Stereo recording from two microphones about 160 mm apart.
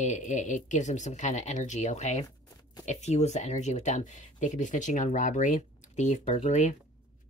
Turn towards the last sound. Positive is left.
turn(degrees=45)  # may be behind; listen again after turning